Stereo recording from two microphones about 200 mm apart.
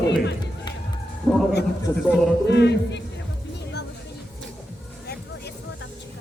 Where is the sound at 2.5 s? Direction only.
60° left (ahead or behind).